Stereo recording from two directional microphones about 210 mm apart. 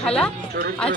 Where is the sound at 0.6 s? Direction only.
45° right (ahead or behind).